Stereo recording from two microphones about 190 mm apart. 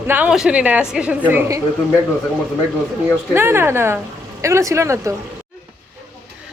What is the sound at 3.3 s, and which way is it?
A woman's voice, 10° right (ahead or behind).